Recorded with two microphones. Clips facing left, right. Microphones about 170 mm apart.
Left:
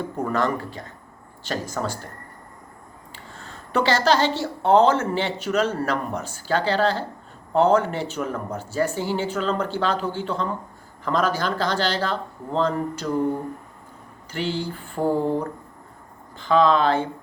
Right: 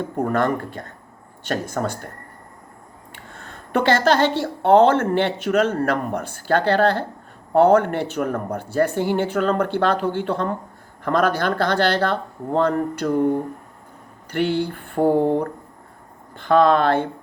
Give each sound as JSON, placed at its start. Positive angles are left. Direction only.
{"t": 0.0, "sound": "speech", "side_deg": -50}
{"t": 3.1, "sound": "speech", "side_deg": -60}
{"t": 14.3, "sound": "speech", "side_deg": -60}